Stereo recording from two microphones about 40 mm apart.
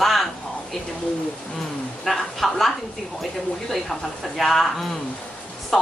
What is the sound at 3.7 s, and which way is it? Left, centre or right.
Speech, centre.